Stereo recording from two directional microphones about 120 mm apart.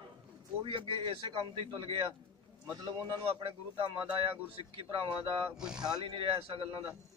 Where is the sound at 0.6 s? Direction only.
40° right (ahead or behind).